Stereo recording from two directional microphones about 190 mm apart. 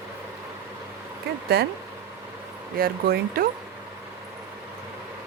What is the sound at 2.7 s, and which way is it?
Speech, 50° right (ahead or behind).